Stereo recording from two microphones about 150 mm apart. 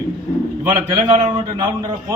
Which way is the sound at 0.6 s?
35° right (ahead or behind).